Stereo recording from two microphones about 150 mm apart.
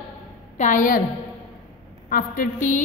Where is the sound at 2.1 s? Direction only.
65° left (ahead or behind).